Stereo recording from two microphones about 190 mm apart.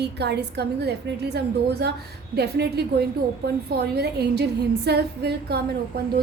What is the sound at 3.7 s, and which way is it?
A woman's voice, 60° right (ahead or behind).